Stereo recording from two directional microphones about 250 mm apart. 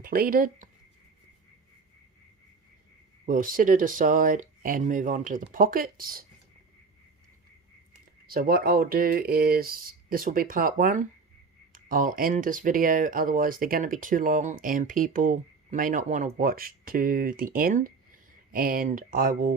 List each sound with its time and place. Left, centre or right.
0.0 s speech: right
3.2 s speech: right
8.3 s speech: right